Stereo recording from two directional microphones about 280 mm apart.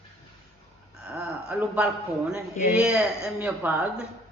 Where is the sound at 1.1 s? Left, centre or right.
Centre.